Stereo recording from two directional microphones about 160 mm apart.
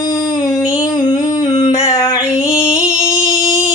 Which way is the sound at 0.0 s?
25° left (ahead or behind).